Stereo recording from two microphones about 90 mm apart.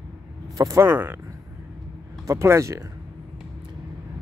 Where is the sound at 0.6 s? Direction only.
40° right (ahead or behind).